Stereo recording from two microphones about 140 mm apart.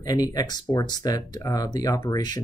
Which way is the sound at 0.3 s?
25° left (ahead or behind).